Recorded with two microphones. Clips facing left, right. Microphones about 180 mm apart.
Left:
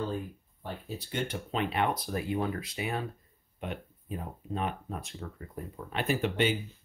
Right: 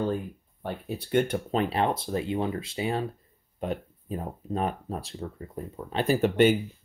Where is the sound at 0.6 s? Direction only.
60° right (ahead or behind); by 6.1 s 30° right (ahead or behind).